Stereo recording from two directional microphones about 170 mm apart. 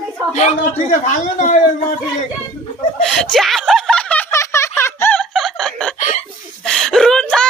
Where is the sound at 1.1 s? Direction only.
45° left (ahead or behind).